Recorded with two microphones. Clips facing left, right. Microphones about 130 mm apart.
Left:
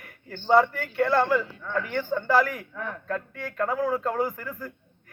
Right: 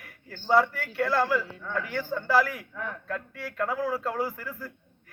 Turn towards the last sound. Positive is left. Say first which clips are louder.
# left 3 dB
turn(degrees=-5)  # may be behind; listen again after turning